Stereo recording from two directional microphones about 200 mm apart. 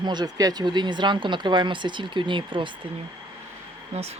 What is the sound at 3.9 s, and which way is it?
Speech, 35° right (ahead or behind).